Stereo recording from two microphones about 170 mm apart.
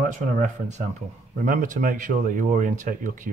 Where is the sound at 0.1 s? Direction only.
50° right (ahead or behind).